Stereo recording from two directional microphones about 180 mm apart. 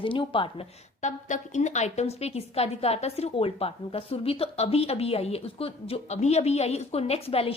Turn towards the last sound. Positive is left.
turn(degrees=35)  # may be behind; listen again after turning